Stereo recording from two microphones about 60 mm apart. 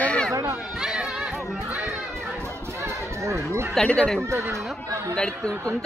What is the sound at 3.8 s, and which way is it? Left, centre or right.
Speech, centre.